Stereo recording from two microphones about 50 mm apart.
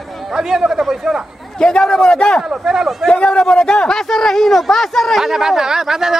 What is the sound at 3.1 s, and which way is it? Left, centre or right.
A man's voice, left.